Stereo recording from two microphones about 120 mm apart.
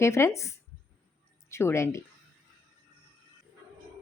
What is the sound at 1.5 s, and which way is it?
Speech, 20° left (ahead or behind).